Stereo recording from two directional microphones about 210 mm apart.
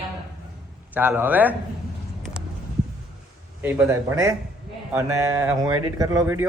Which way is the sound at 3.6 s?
10° right (ahead or behind).